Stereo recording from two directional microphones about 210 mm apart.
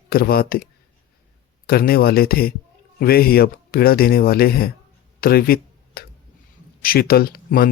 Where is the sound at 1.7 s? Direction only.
45° left (ahead or behind).